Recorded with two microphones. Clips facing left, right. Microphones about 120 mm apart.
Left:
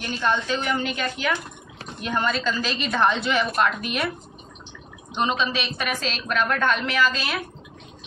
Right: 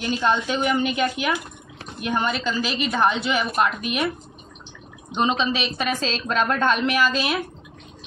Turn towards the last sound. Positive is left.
turn(degrees=-20)  # may be behind; listen again after turning